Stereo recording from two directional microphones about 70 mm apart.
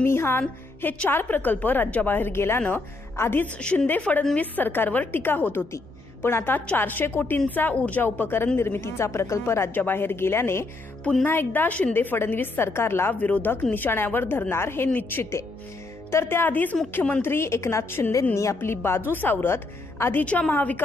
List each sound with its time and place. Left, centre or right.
0.0 s a woman's voice: left
3.5 s a woman's voice: centre
8.0 s speech: left
9.8 s speech: left
11.2 s a woman's voice: left
13.2 s a woman's voice: left
16.1 s speech: left
18.3 s speech: left
20.2 s a woman's voice: left